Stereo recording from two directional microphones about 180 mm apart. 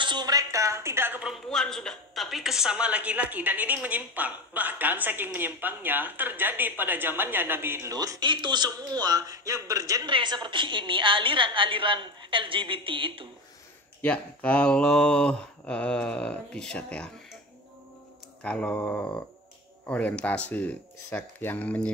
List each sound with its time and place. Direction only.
0.0 s a sound: 25° right (ahead or behind)
1.5 s a woman's voice: 5° left (ahead or behind); by 13.3 s 30° right (ahead or behind)
14.0 s speech: 5° left (ahead or behind)
18.4 s speech: 5° left (ahead or behind)